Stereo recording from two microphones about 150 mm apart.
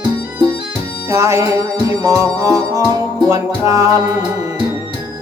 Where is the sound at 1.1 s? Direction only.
20° right (ahead or behind).